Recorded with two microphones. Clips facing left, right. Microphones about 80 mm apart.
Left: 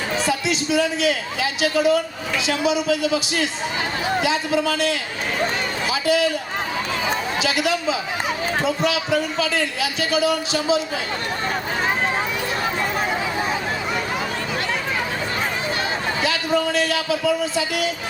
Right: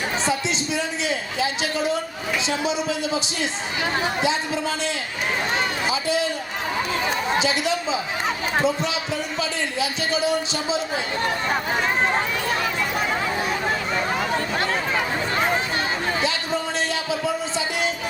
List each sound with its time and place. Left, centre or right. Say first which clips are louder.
0.3 s a sound: left 2 dB; right
1.0 s a man's voice: left 3 dB; right
7.3 s a man's voice: left 1 dB; right
9.8 s a man's voice: left 2 dB; right
16.2 s a man's voice: left 4 dB; right